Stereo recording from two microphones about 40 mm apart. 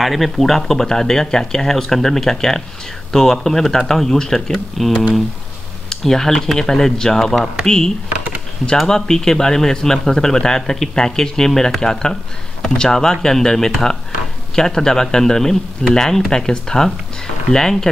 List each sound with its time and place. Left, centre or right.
0.0 s speech: centre